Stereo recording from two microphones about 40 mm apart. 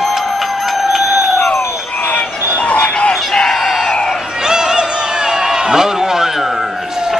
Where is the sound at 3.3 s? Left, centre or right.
Centre.